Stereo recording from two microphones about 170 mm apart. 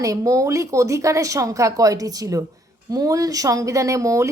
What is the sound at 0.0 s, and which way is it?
A woman's voice, 20° right (ahead or behind).